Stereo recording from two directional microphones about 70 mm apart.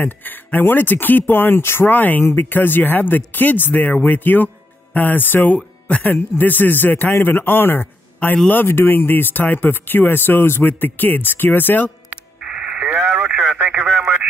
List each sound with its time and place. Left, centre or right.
0.0 s speech: left
12.4 s radio: centre